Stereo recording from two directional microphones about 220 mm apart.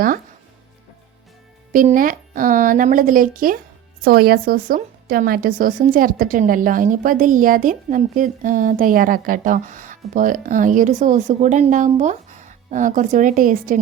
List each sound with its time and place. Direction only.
1.7 s a woman's voice: 40° right (ahead or behind)